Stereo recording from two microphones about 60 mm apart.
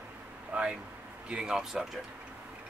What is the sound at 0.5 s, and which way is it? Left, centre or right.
Speech, right.